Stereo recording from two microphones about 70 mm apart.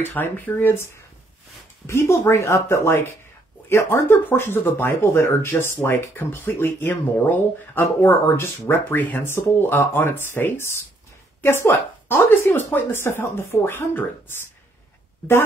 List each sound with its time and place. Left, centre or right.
0.0 s speech: left
1.9 s speech: left
13.7 s speech: left